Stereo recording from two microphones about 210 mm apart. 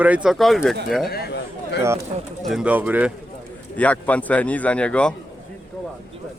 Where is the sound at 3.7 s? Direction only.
5° left (ahead or behind).